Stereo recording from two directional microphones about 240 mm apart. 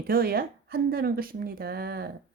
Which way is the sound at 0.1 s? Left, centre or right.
Right.